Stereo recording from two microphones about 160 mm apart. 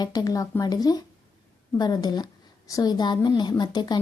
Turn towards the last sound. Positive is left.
turn(degrees=25)  # may be behind; listen again after turning